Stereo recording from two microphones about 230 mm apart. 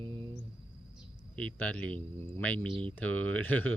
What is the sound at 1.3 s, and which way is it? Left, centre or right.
Speech, centre.